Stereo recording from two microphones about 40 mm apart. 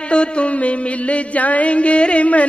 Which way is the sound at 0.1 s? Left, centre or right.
Left.